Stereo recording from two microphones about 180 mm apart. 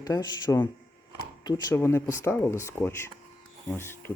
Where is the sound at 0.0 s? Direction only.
20° left (ahead or behind).